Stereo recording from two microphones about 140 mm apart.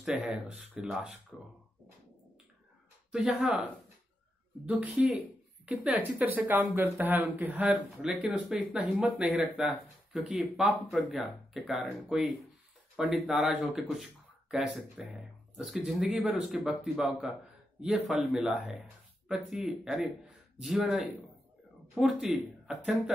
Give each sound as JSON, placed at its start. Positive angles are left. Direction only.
{"t": 0.0, "sound": "speech", "side_deg": -10}
{"t": 3.1, "sound": "speech", "side_deg": -5}